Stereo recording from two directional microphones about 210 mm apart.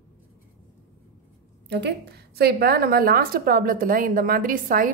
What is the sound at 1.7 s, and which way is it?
A woman's voice, 55° right (ahead or behind).